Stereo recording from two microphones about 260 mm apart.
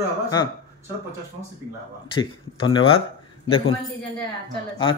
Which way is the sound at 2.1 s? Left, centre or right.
Centre.